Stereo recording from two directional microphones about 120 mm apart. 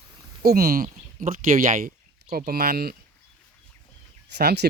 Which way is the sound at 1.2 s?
90° right.